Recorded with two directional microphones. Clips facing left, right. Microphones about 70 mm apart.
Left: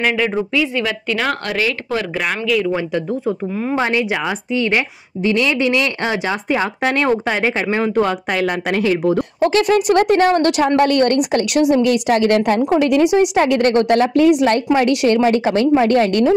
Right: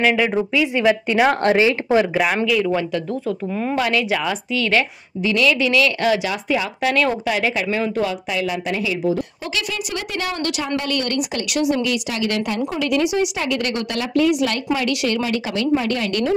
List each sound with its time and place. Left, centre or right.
0.0 s speech: centre
0.7 s speech: centre
2.1 s speech: centre
2.7 s speech: left
5.2 s a woman's voice: left
8.1 s a woman's voice: left